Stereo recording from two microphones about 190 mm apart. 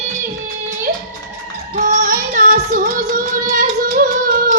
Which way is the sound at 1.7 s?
45° right (ahead or behind).